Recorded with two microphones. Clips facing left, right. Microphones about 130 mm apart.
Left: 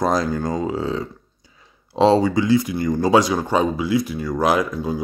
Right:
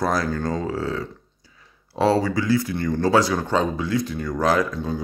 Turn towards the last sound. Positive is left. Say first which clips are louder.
# left 2 dB
turn(degrees=10)  # may be behind; listen again after turning